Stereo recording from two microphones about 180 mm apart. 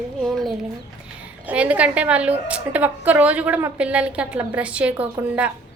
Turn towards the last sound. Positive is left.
turn(degrees=-10)  # may be behind; listen again after turning